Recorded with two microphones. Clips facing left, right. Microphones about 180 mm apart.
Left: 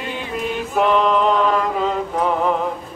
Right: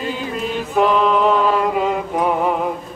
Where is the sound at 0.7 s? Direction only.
Centre (ahead or behind).